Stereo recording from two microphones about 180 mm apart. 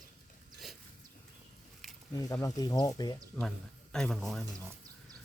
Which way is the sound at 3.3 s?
5° left (ahead or behind).